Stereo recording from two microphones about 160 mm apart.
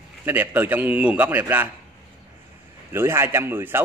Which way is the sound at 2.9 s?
15° right (ahead or behind).